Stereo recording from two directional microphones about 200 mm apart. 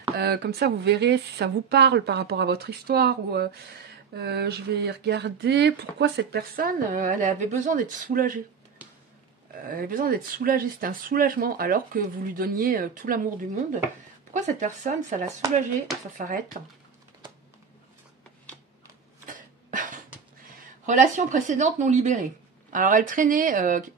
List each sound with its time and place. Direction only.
0.2 s speech: 50° right (ahead or behind)
9.7 s speech: 45° right (ahead or behind)
19.2 s cough: 40° right (ahead or behind)
20.8 s speech: 40° right (ahead or behind)